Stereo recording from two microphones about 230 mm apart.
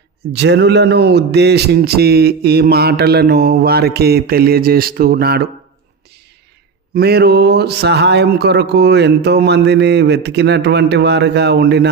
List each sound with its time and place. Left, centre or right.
0.3 s speech: right
6.9 s speech: right